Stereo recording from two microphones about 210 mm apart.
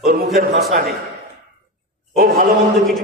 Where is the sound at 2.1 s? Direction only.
45° right (ahead or behind).